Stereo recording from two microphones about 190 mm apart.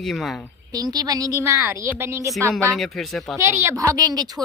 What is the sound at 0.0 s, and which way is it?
Speech, centre (ahead or behind).